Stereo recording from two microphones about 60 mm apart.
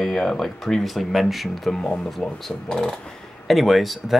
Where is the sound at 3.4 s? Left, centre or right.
Centre.